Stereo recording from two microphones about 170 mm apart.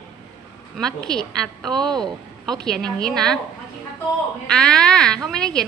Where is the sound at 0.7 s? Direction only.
5° left (ahead or behind).